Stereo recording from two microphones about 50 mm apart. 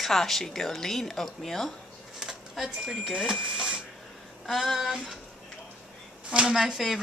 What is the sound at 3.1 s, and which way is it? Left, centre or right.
Speech, centre.